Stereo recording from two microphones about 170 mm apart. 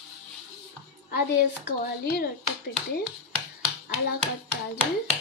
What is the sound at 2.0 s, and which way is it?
Speech, 65° left (ahead or behind).